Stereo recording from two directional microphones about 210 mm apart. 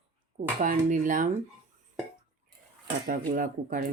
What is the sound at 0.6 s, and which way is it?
Speech, 40° right (ahead or behind).